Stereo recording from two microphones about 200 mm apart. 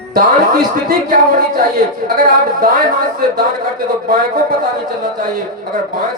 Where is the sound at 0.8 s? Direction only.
40° right (ahead or behind).